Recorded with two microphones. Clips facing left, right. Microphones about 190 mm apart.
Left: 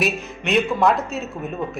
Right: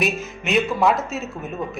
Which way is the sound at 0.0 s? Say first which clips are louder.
Even; centre (ahead or behind).